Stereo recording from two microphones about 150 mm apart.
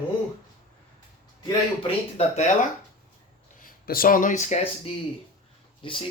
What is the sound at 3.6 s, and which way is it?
Speech, 70° left (ahead or behind).